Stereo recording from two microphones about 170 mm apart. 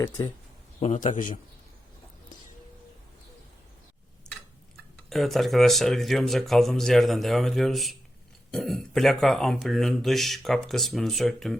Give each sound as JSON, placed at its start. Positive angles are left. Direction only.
{"t": 0.8, "sound": "a man's voice", "side_deg": 45}
{"t": 5.0, "sound": "speech", "side_deg": 0}